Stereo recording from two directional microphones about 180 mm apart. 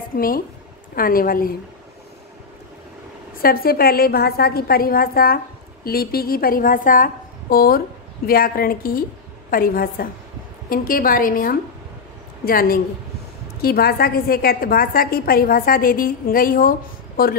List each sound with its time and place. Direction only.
0.1 s a woman's voice: 50° left (ahead or behind)
3.4 s a woman's voice: 55° left (ahead or behind)